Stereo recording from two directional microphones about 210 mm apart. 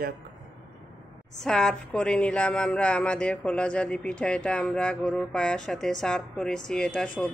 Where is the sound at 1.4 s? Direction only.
Centre (ahead or behind).